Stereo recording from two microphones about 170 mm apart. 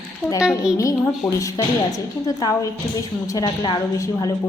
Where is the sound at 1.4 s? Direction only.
20° left (ahead or behind).